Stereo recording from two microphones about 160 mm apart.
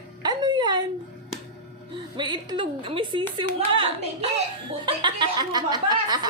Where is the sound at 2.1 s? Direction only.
30° right (ahead or behind).